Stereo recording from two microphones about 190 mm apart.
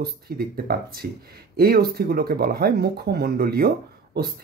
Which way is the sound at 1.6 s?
55° right (ahead or behind).